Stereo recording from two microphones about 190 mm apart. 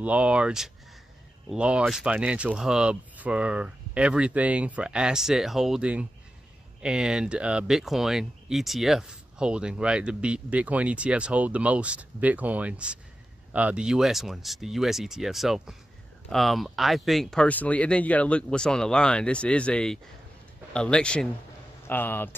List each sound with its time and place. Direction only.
0.0 s speech: 5° right (ahead or behind); by 22.3 s 10° left (ahead or behind)